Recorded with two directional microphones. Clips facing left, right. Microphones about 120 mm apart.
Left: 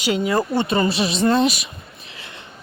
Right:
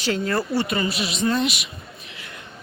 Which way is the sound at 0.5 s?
30° left (ahead or behind).